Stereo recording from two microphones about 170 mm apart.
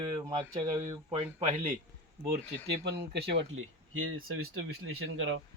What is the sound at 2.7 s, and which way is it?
Speech, 75° right (ahead or behind).